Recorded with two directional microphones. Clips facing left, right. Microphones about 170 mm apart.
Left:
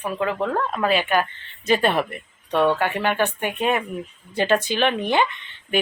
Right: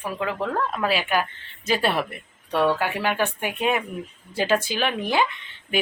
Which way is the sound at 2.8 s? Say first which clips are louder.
Left 2 dB; 5° right (ahead or behind).